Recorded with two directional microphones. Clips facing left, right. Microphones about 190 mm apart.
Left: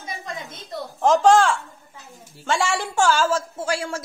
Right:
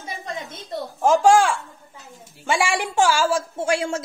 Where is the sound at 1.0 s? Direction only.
10° right (ahead or behind).